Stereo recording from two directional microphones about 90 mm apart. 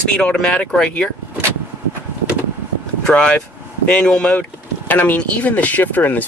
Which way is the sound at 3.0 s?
10° left (ahead or behind).